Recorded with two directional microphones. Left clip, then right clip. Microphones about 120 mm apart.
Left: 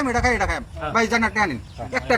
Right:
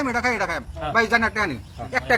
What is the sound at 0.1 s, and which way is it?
Speech, 15° left (ahead or behind).